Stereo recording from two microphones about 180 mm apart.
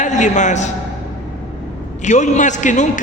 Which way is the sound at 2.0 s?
40° left (ahead or behind).